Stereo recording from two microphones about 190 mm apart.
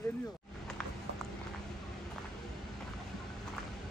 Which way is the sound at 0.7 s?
5° left (ahead or behind).